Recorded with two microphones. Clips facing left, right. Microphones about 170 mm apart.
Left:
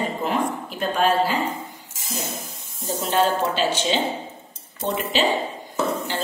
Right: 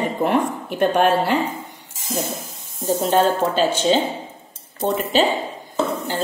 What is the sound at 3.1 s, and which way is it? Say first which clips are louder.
Speech: right 2 dB; 50° right (ahead or behind).